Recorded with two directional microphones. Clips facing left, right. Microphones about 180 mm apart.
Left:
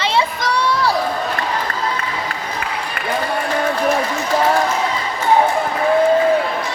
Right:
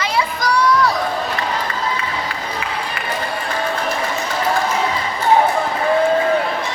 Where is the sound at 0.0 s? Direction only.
25° left (ahead or behind).